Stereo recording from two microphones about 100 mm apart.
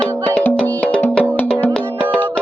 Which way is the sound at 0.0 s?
10° left (ahead or behind).